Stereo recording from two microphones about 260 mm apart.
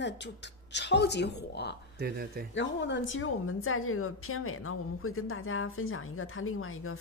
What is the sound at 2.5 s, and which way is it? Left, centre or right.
A woman's voice, left.